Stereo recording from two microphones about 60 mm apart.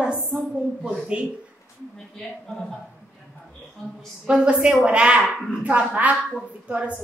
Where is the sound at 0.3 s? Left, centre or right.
Centre.